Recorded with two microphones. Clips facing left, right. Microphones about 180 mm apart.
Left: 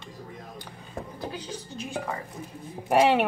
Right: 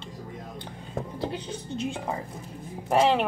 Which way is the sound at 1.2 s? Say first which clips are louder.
Right 2 dB; 25° right (ahead or behind).